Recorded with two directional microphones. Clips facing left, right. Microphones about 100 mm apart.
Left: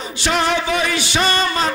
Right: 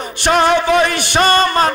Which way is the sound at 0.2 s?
55° right (ahead or behind).